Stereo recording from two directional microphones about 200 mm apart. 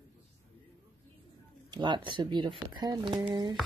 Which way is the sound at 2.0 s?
25° right (ahead or behind).